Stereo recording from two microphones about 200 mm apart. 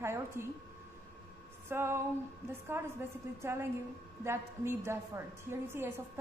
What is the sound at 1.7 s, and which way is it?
A woman's voice, 10° right (ahead or behind).